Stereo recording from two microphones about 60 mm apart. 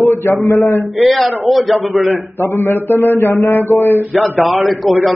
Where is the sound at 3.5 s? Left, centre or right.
Left.